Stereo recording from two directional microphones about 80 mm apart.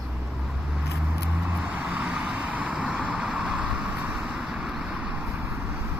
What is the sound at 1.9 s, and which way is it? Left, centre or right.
Vehicle, centre.